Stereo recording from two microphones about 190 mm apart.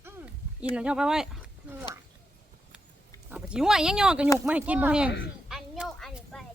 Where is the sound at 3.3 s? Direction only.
5° right (ahead or behind).